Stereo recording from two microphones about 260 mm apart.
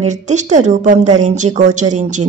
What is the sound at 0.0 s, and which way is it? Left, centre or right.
Speech, right.